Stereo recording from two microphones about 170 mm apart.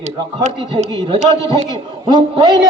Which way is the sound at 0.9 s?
25° right (ahead or behind).